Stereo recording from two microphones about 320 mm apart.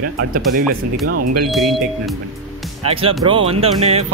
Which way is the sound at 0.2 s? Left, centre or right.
Right.